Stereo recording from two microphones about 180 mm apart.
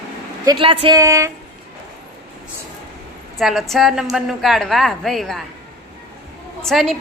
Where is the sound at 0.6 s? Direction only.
30° right (ahead or behind).